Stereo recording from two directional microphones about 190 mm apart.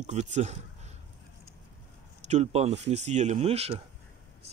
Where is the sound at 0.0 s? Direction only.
35° right (ahead or behind).